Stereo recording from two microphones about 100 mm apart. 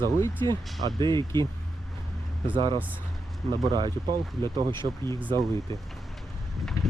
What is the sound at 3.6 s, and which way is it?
Speech, 45° right (ahead or behind).